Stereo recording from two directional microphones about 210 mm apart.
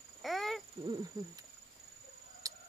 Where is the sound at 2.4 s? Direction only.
15° right (ahead or behind).